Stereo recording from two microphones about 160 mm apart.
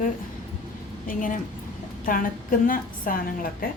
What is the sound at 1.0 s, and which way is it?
A woman's voice, 55° left (ahead or behind).